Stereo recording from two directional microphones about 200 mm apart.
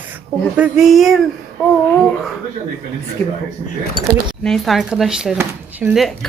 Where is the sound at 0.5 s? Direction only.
5° right (ahead or behind).